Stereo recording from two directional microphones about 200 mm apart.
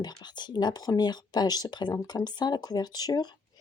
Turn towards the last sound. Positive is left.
turn(degrees=20)  # may be behind; listen again after turning